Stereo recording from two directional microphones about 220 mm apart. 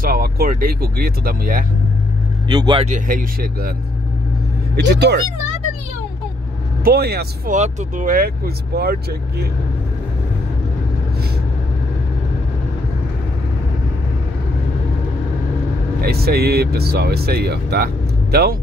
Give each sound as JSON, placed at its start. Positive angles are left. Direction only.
{"t": 0.0, "sound": "speech", "side_deg": -40}
{"t": 2.5, "sound": "speech", "side_deg": -20}
{"t": 4.7, "sound": "speech", "side_deg": -50}
{"t": 6.8, "sound": "speech", "side_deg": -45}
{"t": 16.0, "sound": "speech", "side_deg": -45}